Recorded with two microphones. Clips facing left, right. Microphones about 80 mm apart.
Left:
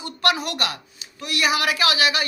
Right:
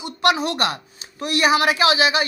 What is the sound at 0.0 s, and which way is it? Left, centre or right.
Speech, right.